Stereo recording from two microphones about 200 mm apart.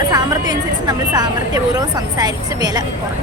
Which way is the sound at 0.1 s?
20° right (ahead or behind).